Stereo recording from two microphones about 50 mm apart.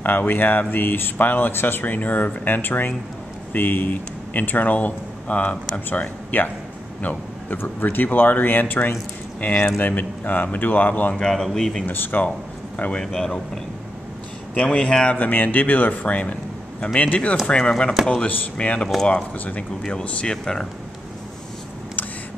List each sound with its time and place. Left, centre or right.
0.0 s speech: left
7.0 s a sound: left
7.5 s speech: left
11.1 s speech: centre
11.8 s speech: left
12.7 s speech: left
13.0 s speech: centre
14.5 s speech: left
15.1 s speech: left; by 20.6 s centre